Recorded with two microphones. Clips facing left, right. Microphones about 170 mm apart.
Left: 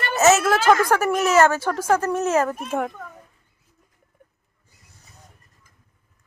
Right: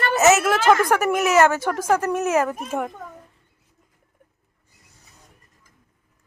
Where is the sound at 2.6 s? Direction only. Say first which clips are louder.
Left 1 dB; centre (ahead or behind).